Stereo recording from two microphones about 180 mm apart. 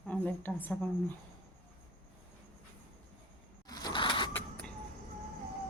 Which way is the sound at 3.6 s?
20° left (ahead or behind).